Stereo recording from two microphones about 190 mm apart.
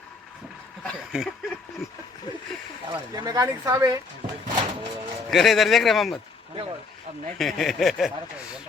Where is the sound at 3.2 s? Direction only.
20° right (ahead or behind).